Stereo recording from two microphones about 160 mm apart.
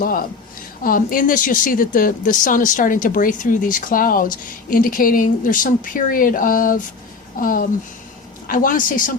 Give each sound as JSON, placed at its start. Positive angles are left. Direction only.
{"t": 0.0, "sound": "speech", "side_deg": 65}